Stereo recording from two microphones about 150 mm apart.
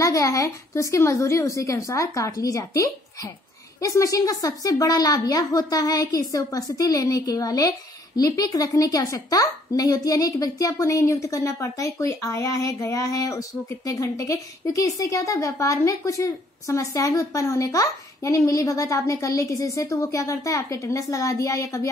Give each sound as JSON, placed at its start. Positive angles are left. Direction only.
{"t": 0.0, "sound": "a woman's voice", "side_deg": 20}